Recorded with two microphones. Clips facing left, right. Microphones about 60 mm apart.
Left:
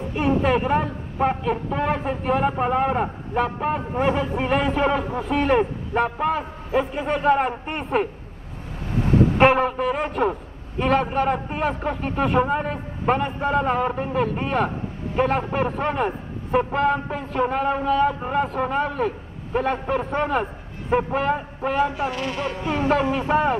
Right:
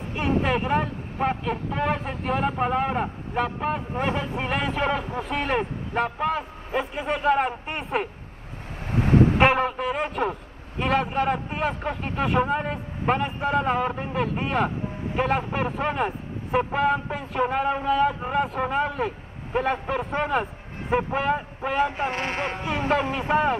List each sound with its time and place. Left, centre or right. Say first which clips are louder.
0.1 s a woman's voice: left 3 dB; centre
9.4 s a man's voice: left 3 dB; centre
21.9 s speech: left 1 dB; right
23.1 s a man's voice: left 2 dB; centre